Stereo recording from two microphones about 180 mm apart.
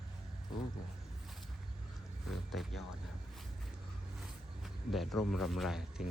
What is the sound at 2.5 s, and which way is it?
Speech, centre (ahead or behind).